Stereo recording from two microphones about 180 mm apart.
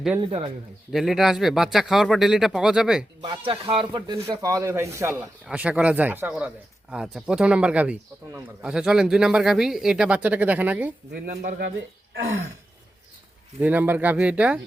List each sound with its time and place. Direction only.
0.2 s speech: 30° right (ahead or behind)
0.9 s speech: centre (ahead or behind)
3.2 s speech: 30° right (ahead or behind); by 10.9 s 10° right (ahead or behind)
11.1 s speech: 60° right (ahead or behind)
13.6 s speech: 10° right (ahead or behind)